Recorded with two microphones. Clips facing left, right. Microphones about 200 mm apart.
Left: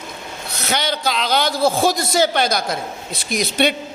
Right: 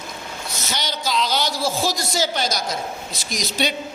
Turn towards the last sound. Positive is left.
turn(degrees=60)  # may be behind; listen again after turning